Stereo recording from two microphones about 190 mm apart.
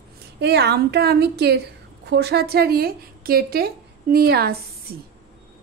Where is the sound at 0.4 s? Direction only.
60° right (ahead or behind).